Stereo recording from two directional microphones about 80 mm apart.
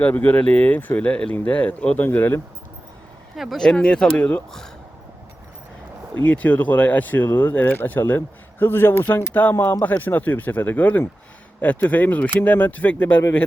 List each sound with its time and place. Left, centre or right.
0.0 s speech: centre
3.3 s speech: centre
3.6 s speech: centre
6.1 s speech: centre